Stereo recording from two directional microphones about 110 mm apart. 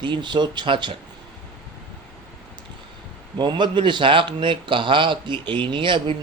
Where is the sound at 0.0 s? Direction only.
45° right (ahead or behind).